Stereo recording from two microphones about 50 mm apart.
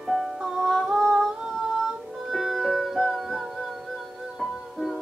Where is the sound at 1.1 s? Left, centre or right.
Centre.